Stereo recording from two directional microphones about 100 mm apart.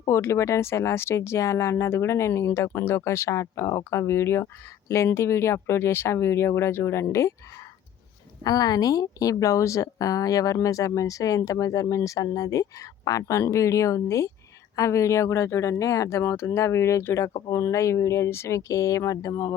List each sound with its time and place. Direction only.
0.0 s speech: 30° left (ahead or behind)
8.4 s speech: 40° left (ahead or behind)